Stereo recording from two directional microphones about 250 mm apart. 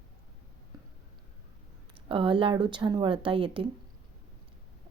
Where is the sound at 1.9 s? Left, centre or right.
Right.